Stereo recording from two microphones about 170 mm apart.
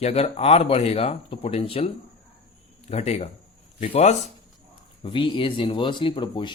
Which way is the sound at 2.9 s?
40° left (ahead or behind).